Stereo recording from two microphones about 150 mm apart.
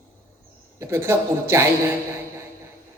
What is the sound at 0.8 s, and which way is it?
Speech, 15° right (ahead or behind).